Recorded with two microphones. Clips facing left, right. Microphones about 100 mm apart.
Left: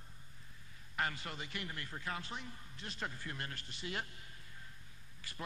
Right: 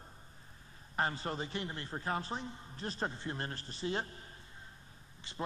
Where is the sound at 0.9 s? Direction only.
30° right (ahead or behind).